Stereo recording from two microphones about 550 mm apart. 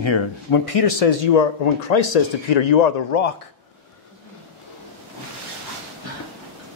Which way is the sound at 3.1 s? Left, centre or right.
Left.